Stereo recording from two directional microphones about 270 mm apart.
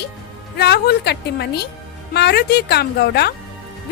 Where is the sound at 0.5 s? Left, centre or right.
Left.